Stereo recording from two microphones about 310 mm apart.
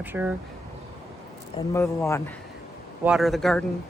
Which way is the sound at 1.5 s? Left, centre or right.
Centre.